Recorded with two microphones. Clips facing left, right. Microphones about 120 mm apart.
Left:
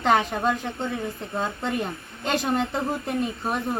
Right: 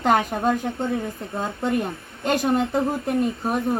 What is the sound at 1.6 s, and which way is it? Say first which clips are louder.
Speech: right 4 dB; 45° right (ahead or behind).